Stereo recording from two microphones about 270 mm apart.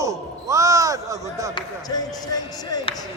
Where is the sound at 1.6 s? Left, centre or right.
Centre.